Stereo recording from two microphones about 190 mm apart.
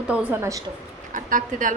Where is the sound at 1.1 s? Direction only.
45° right (ahead or behind).